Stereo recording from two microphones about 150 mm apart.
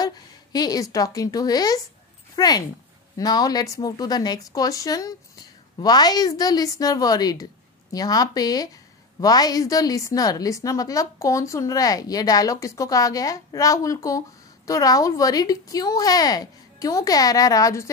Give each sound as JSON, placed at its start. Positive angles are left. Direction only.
{"t": 0.0, "sound": "a woman's voice", "side_deg": 25}